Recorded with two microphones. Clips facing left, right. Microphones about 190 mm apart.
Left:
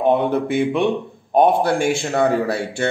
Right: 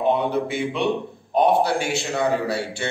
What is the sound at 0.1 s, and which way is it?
A man's voice, 55° left (ahead or behind).